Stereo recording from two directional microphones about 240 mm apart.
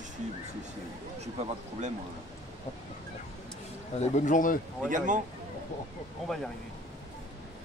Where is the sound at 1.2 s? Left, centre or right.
Right.